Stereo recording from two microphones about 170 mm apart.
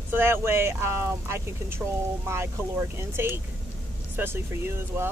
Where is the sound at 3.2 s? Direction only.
15° right (ahead or behind).